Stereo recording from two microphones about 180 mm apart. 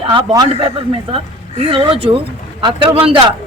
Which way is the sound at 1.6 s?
30° right (ahead or behind).